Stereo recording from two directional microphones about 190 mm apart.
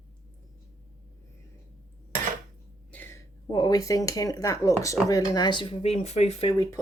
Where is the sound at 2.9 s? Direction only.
10° left (ahead or behind); by 6.6 s 30° left (ahead or behind).